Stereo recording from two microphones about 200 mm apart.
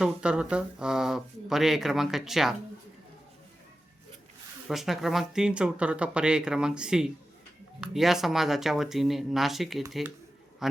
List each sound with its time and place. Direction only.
0.0 s speech: 5° right (ahead or behind)
4.7 s a man's voice: centre (ahead or behind)